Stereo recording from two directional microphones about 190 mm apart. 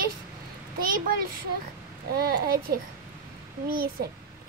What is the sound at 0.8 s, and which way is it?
A child's voice, 50° right (ahead or behind).